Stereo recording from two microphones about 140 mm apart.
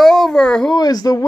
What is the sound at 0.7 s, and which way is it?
Speech, 30° left (ahead or behind).